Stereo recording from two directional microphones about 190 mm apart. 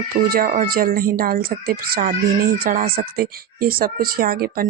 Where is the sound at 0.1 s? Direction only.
50° right (ahead or behind).